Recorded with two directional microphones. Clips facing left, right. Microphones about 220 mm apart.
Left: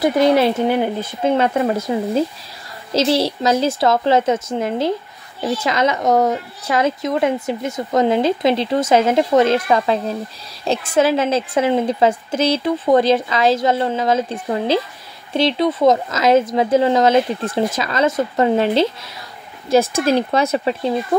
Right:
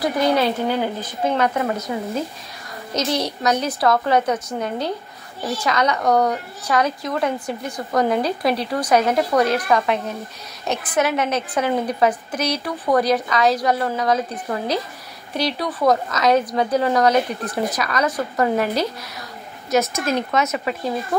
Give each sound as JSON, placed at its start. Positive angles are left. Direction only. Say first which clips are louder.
{"t": 0.0, "sound": "a woman's voice", "louder": "left 5 dB", "side_deg": 25}